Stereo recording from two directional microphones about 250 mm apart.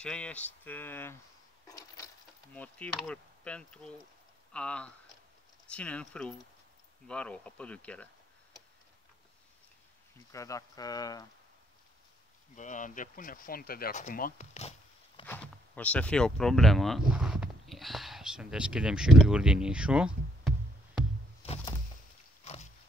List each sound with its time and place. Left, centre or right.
0.0 s speech: centre
10.3 s speech: centre
12.5 s speech: left
15.2 s speech: centre
21.4 s a sound: left
22.4 s pig: left